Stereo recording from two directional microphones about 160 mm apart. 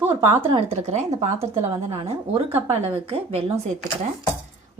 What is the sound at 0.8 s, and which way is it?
Speech, 45° right (ahead or behind).